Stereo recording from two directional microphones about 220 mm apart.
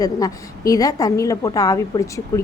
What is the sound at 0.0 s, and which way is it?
A woman's voice, 15° left (ahead or behind).